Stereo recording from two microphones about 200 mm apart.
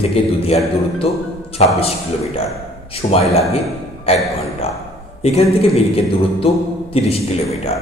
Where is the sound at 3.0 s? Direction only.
30° left (ahead or behind).